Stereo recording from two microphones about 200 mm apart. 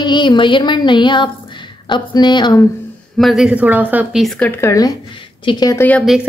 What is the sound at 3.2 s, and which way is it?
Speech, centre (ahead or behind).